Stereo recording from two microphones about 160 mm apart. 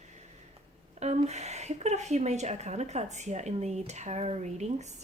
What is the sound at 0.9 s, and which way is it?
A woman's voice, 45° right (ahead or behind).